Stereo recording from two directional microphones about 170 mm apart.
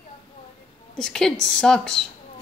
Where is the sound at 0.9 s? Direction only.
5° left (ahead or behind).